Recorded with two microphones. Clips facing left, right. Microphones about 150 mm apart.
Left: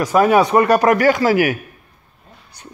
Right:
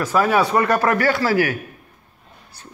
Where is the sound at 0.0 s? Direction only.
15° left (ahead or behind).